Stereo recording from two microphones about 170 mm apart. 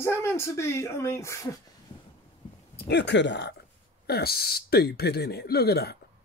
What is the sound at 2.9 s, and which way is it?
Speech, 90° left.